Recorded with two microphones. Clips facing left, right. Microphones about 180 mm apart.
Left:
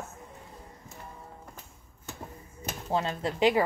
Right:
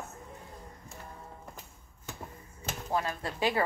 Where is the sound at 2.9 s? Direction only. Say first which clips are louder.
Left 3 dB; 25° left (ahead or behind).